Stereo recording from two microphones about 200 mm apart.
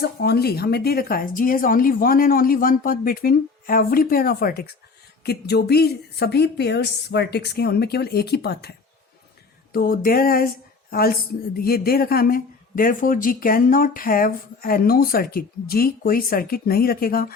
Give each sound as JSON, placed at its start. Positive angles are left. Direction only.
{"t": 0.0, "sound": "speech", "side_deg": 55}
{"t": 9.7, "sound": "speech", "side_deg": 45}